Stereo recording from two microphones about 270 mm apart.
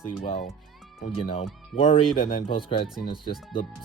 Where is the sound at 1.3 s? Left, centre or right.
Left.